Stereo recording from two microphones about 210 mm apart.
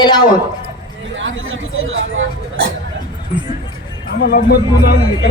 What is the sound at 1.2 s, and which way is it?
Speech, 70° right (ahead or behind).